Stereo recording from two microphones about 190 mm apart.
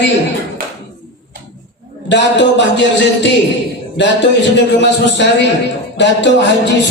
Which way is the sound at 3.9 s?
70° left (ahead or behind).